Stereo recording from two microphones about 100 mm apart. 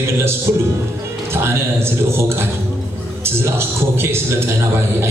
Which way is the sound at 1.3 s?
25° right (ahead or behind).